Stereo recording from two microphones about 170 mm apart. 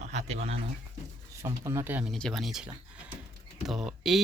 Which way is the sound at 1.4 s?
15° right (ahead or behind).